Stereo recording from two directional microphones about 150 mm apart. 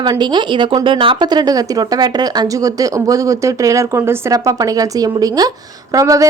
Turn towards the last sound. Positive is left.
turn(degrees=-20)  # may be behind; listen again after turning